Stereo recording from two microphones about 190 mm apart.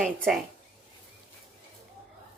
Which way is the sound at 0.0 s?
Centre (ahead or behind).